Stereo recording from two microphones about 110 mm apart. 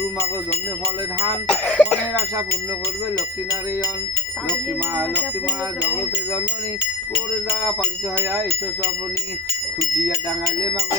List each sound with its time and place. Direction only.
1.5 s cough: 10° left (ahead or behind)
5.1 s speech: 10° right (ahead or behind)
8.2 s speech: 25° right (ahead or behind)